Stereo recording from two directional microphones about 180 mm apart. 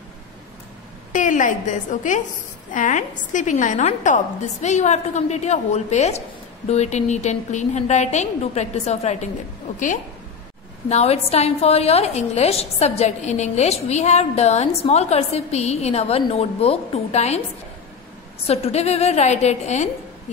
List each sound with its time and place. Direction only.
1.1 s a woman's voice: 45° left (ahead or behind)
10.9 s a woman's voice: 35° left (ahead or behind)
18.5 s a woman's voice: 35° left (ahead or behind)